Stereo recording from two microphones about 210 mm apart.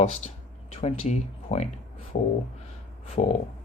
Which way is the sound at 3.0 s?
30° left (ahead or behind).